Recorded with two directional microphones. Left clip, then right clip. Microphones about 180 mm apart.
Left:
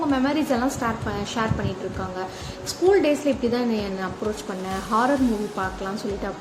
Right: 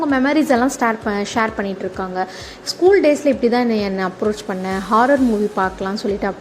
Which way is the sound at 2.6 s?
40° right (ahead or behind).